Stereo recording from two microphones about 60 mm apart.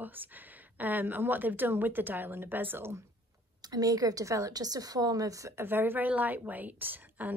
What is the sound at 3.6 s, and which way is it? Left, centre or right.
A woman's voice, right.